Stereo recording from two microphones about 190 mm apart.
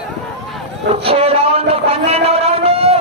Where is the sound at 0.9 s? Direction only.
30° right (ahead or behind).